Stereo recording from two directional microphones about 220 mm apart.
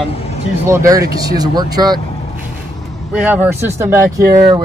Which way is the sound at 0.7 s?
15° right (ahead or behind).